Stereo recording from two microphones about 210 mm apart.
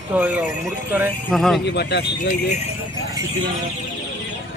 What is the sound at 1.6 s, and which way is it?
Speech, 55° left (ahead or behind).